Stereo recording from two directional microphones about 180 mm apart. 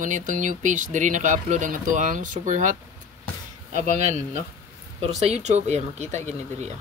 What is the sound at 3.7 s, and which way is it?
Speech, 40° right (ahead or behind).